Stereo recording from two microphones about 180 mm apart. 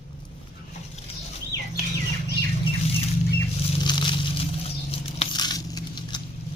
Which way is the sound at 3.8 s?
25° left (ahead or behind).